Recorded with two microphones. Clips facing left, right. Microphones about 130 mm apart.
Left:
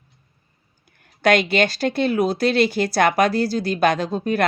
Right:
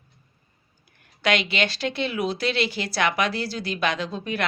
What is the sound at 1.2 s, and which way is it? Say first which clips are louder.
Speech: left 7 dB; 45° left (ahead or behind).